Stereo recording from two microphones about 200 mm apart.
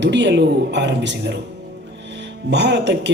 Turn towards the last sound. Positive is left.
turn(degrees=-60)  # may be behind; listen again after turning